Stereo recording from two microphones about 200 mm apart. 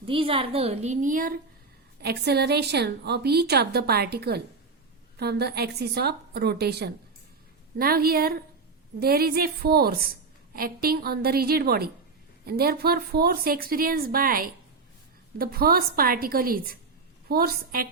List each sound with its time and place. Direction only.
0.0 s a woman's voice: 25° right (ahead or behind)
2.0 s a woman's voice: 55° right (ahead or behind)